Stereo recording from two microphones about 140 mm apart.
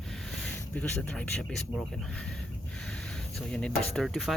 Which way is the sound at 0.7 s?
10° left (ahead or behind).